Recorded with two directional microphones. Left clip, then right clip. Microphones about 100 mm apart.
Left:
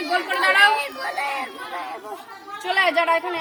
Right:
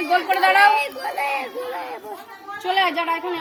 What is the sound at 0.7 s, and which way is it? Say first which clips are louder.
Speech: right 2 dB; 35° left (ahead or behind).